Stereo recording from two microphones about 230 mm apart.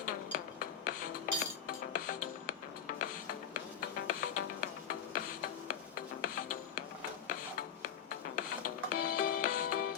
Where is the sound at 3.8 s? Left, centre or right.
Left.